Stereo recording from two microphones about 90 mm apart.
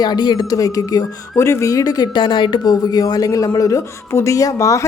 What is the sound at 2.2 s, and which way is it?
Speech, 65° left (ahead or behind).